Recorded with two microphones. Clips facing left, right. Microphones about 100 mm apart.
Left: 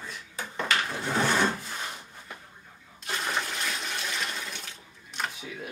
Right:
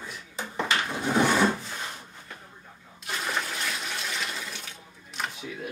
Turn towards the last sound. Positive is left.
turn(degrees=0)  # may be behind; listen again after turning